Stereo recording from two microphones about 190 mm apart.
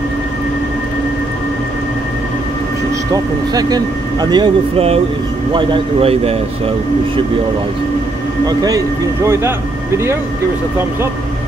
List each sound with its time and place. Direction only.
3.5 s speech: 20° right (ahead or behind)
8.5 s speech: 20° right (ahead or behind)